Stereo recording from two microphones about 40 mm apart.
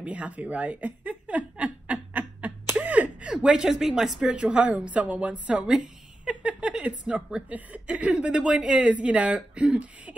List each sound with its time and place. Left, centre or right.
0.0 s a sound: right
3.3 s speech: right
4.3 s speech: right
5.8 s a sound: right
6.8 s speech: right
8.4 s speech: right